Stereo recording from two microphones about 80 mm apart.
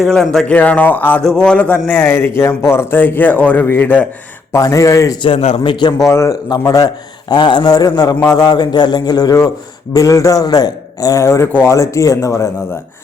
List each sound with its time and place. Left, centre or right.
0.0 s a man's voice: centre
0.4 s a man's voice: centre
1.9 s a man's voice: left
4.5 s a man's voice: left
5.2 s a man's voice: left
6.0 s a man's voice: left
7.3 s speech: left
7.7 s a man's voice: left